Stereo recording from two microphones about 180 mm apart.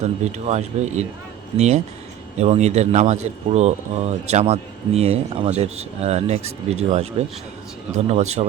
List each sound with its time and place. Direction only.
0.0 s speech: 40° right (ahead or behind)